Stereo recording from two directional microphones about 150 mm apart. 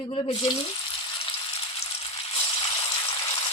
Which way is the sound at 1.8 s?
40° left (ahead or behind).